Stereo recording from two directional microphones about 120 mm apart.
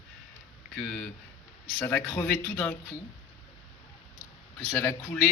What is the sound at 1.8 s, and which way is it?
Speech, 15° left (ahead or behind).